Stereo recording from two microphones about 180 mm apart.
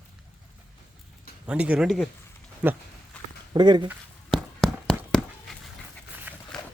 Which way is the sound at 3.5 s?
25° right (ahead or behind).